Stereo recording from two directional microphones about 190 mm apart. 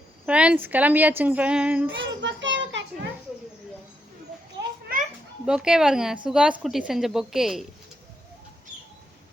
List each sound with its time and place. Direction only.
0.3 s a woman's voice: 5° right (ahead or behind)
2.0 s a child's voice: 75° right (ahead or behind)
5.5 s a woman's voice: 5° right (ahead or behind)